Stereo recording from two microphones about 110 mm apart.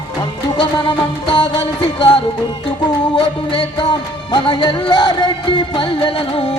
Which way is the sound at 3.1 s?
50° left (ahead or behind).